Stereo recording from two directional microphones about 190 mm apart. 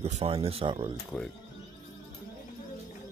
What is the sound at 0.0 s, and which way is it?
Speech, 30° right (ahead or behind).